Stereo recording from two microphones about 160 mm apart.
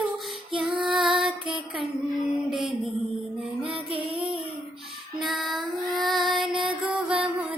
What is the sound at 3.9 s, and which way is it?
Child singing, 35° right (ahead or behind).